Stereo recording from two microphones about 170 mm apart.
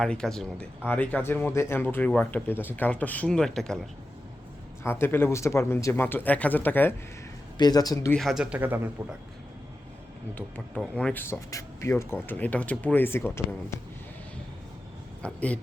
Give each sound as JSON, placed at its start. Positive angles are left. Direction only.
{"t": 0.0, "sound": "speech", "side_deg": 5}
{"t": 4.8, "sound": "speech", "side_deg": 15}
{"t": 7.6, "sound": "a man's voice", "side_deg": 20}
{"t": 8.1, "sound": "speech", "side_deg": 0}
{"t": 10.3, "sound": "speech", "side_deg": 5}
{"t": 15.2, "sound": "speech", "side_deg": 5}